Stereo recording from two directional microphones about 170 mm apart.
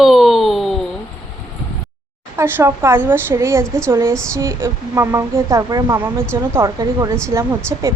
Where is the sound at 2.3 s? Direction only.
15° right (ahead or behind).